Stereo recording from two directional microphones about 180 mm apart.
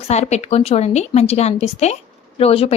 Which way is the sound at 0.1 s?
40° left (ahead or behind).